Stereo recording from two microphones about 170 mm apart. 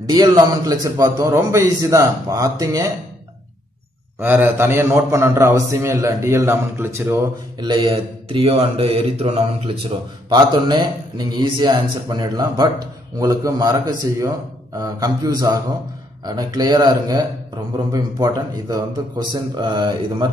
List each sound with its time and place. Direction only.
0.1 s a man's voice: 25° right (ahead or behind)
4.2 s a man's voice: 10° right (ahead or behind)
7.6 s speech: 25° right (ahead or behind)
9.8 s a man's voice: 25° right (ahead or behind)